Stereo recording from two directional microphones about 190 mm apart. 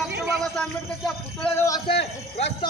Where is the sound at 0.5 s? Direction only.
5° left (ahead or behind).